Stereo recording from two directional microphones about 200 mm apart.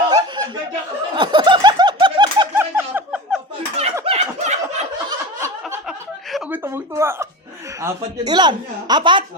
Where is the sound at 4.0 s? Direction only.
30° right (ahead or behind).